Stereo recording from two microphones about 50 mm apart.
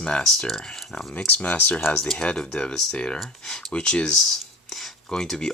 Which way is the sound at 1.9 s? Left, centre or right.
Centre.